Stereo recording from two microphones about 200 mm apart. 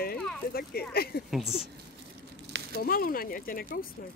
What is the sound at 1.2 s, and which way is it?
Speech, centre (ahead or behind).